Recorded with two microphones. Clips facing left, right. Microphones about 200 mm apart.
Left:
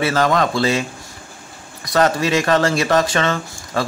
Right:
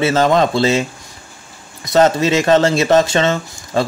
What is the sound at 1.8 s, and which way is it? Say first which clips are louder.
Speech: right 4 dB; 25° right (ahead or behind).